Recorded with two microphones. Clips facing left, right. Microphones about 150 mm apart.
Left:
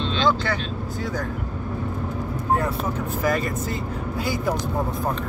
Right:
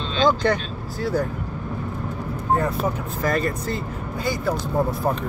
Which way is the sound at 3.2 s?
5° left (ahead or behind).